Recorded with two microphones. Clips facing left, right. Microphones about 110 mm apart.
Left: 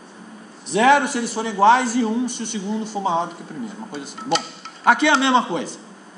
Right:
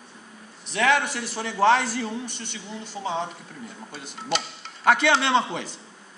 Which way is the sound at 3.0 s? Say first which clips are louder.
Left 6 dB; 25° left (ahead or behind).